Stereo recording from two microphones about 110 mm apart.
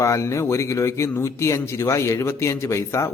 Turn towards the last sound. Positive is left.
turn(degrees=25)  # may be behind; listen again after turning